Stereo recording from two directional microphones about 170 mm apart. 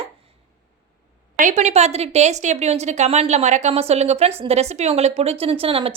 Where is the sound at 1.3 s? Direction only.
45° right (ahead or behind).